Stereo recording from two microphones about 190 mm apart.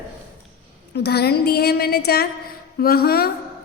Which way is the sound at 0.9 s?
60° left (ahead or behind).